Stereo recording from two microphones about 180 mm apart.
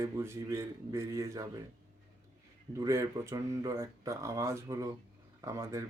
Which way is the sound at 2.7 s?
15° right (ahead or behind).